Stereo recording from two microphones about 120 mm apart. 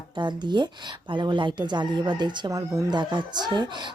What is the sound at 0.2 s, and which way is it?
Speech, 40° right (ahead or behind).